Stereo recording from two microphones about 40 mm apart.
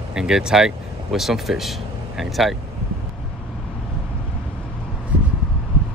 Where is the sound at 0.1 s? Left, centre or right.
Centre.